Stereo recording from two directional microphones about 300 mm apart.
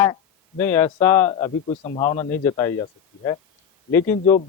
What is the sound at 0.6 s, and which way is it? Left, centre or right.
Speech, centre.